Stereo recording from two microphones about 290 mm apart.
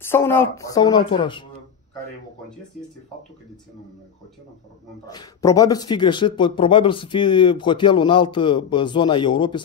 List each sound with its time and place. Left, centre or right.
0.0 s a man's voice: centre
5.0 s a man's voice: centre